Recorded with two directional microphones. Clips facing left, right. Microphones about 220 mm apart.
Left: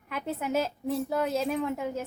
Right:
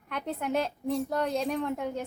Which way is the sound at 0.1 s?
5° left (ahead or behind).